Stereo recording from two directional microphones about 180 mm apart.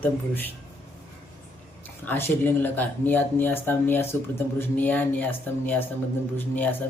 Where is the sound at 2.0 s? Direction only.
10° left (ahead or behind).